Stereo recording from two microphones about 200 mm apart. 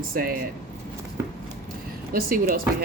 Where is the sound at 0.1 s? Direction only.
45° right (ahead or behind).